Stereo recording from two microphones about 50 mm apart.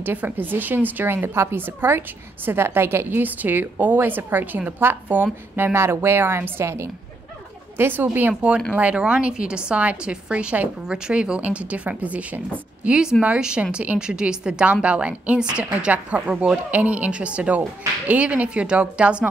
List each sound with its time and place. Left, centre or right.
0.0 s a woman's voice: right
1.0 s a woman's voice: right
5.8 s a woman's voice: right
7.7 s a woman's voice: right
8.9 s a woman's voice: right